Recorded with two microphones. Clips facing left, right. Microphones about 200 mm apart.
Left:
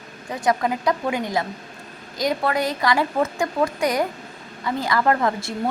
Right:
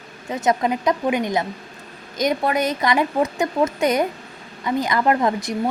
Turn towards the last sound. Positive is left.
turn(degrees=-15)  # may be behind; listen again after turning